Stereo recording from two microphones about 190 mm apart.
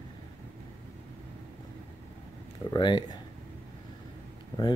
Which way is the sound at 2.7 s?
25° left (ahead or behind).